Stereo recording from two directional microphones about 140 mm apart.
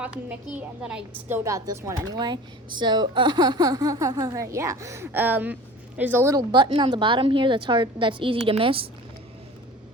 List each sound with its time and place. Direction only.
0.0 s a woman's voice: 10° right (ahead or behind)
6.5 s a woman's voice: 35° right (ahead or behind)